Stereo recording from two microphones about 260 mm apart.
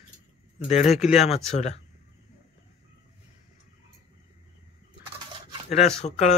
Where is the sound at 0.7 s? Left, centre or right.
Centre.